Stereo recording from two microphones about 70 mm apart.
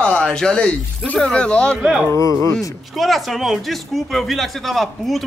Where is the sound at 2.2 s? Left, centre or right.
Left.